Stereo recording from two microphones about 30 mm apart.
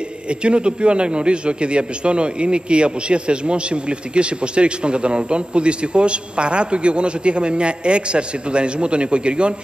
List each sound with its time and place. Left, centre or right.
0.3 s a man's voice: right